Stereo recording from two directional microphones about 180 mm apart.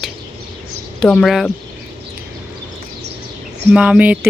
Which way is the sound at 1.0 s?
Centre (ahead or behind).